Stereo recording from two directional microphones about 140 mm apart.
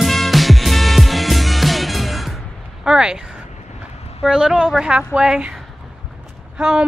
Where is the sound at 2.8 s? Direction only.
5° right (ahead or behind).